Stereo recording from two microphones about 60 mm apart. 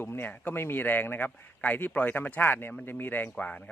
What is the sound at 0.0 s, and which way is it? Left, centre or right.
Speech, left.